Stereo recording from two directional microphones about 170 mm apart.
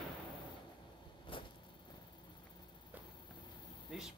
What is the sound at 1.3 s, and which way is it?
Vehicle, 30° left (ahead or behind).